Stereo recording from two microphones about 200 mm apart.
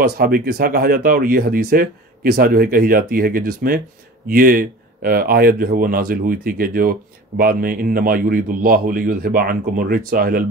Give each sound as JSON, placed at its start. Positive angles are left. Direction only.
{"t": 0.0, "sound": "speech", "side_deg": -50}